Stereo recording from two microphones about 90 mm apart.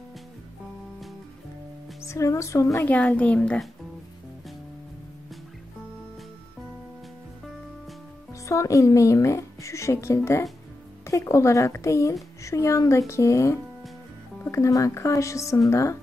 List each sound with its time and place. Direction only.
2.0 s a woman's voice: 35° left (ahead or behind)
2.8 s a woman's voice: 20° left (ahead or behind)
8.3 s a woman's voice: 35° left (ahead or behind)